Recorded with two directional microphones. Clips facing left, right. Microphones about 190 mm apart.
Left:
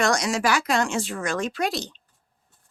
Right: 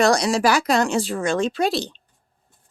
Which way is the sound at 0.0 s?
35° right (ahead or behind).